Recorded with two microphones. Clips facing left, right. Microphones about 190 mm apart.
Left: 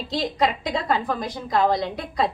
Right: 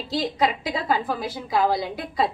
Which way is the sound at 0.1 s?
Centre (ahead or behind).